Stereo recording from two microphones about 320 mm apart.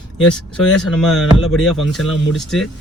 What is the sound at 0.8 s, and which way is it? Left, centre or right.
Speech, centre.